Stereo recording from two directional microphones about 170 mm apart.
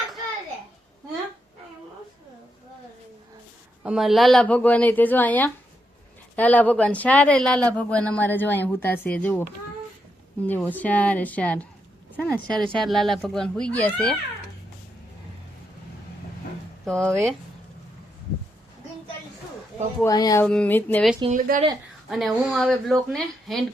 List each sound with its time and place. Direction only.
3.8 s speech: centre (ahead or behind)
10.4 s speech: 10° left (ahead or behind)
16.8 s speech: 5° left (ahead or behind)
20.1 s speech: 20° left (ahead or behind)
20.4 s speech: 10° left (ahead or behind)
21.2 s speech: 50° right (ahead or behind)
22.1 s speech: centre (ahead or behind)